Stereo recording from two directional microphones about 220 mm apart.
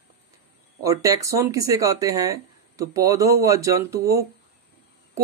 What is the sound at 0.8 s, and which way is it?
A man's voice, 15° right (ahead or behind).